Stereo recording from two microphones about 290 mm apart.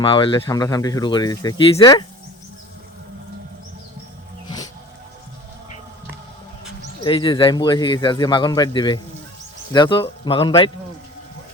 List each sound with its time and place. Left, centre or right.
0.0 s speech: centre
7.0 s speech: centre